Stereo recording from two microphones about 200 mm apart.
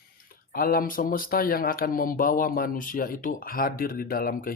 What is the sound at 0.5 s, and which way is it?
Speech, 45° left (ahead or behind).